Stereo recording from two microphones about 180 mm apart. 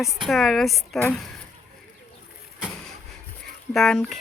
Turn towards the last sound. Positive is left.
turn(degrees=5)  # may be behind; listen again after turning